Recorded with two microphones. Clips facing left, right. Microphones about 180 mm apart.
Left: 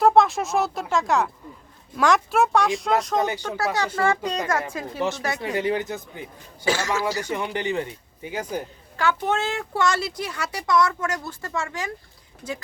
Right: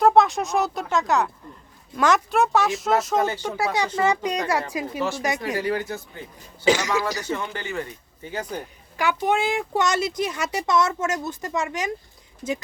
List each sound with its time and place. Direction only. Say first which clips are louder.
0.0 s speech: even; centre (ahead or behind)
3.2 s speech: right 1 dB; 15° left (ahead or behind)
3.9 s a child's voice: right 1 dB; 15° right (ahead or behind)
5.5 s a man's voice: left 1 dB; 20° left (ahead or behind)
6.7 s a child's voice: right 3 dB; 20° right (ahead or behind)
7.2 s speech: left 2 dB; 15° left (ahead or behind)
9.0 s speech: right 1 dB; 15° right (ahead or behind)